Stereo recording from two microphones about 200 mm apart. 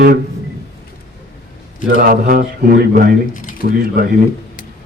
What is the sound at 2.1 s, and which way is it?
Speech, 45° right (ahead or behind).